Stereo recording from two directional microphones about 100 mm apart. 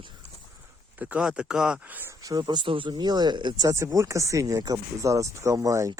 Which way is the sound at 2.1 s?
35° right (ahead or behind).